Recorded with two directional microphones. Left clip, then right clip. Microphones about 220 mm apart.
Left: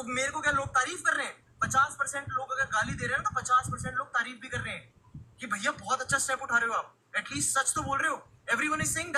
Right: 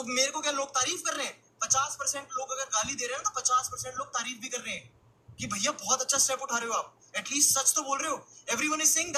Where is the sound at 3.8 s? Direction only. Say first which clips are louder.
Left 3 dB; 5° left (ahead or behind).